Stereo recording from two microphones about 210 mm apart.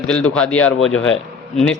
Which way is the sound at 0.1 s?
5° left (ahead or behind).